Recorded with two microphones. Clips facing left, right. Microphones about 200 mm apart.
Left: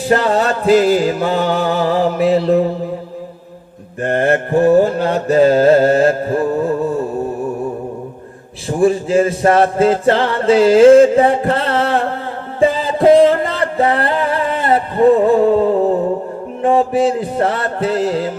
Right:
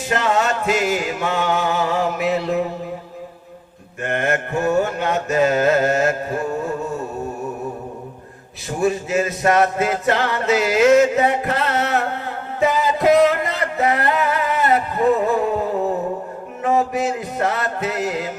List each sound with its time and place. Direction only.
0.1 s music: 35° left (ahead or behind)
4.0 s music: 35° left (ahead or behind)
8.8 s music: 30° left (ahead or behind)
12.5 s a sound: 30° left (ahead or behind)
16.6 s music: 30° left (ahead or behind)